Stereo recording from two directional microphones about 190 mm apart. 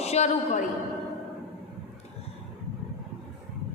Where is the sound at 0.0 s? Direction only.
35° left (ahead or behind).